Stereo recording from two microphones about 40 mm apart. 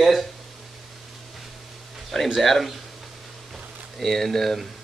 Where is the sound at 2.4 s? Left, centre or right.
Centre.